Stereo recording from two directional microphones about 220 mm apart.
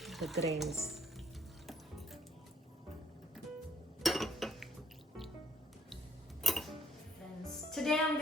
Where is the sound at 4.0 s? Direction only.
Centre (ahead or behind).